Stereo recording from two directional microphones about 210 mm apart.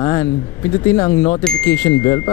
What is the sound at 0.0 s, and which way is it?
Speech, 15° left (ahead or behind).